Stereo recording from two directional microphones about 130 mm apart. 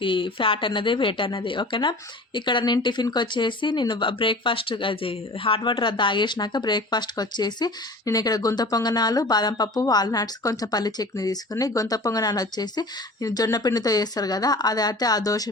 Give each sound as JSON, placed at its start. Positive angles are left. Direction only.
{"t": 0.0, "sound": "a woman's voice", "side_deg": 40}